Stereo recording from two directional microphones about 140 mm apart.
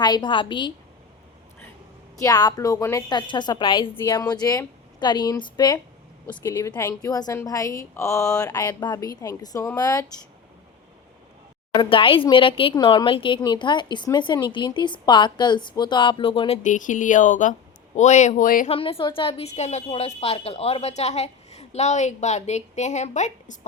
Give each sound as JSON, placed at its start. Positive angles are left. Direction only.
{"t": 0.0, "sound": "speech", "side_deg": 30}
{"t": 2.1, "sound": "a woman's voice", "side_deg": 25}
{"t": 6.4, "sound": "a woman's voice", "side_deg": 20}
{"t": 11.7, "sound": "speech", "side_deg": 40}
{"t": 16.6, "sound": "speech", "side_deg": 65}
{"t": 18.7, "sound": "a woman's voice", "side_deg": 40}